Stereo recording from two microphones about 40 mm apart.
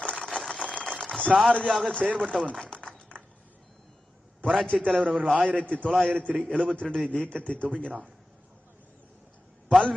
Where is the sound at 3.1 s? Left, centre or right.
Left.